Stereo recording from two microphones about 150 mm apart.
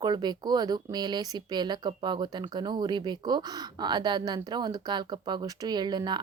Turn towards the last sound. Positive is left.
turn(degrees=-30)  # may be behind; listen again after turning